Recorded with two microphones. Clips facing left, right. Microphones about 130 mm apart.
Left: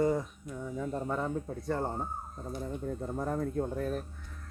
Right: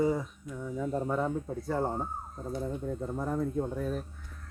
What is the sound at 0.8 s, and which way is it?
Speech, 10° right (ahead or behind).